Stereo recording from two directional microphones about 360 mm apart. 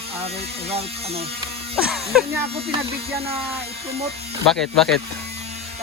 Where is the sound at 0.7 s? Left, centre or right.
Centre.